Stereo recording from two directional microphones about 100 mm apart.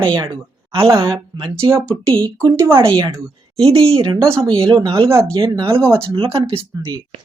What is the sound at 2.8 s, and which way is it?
Speech, 60° right (ahead or behind).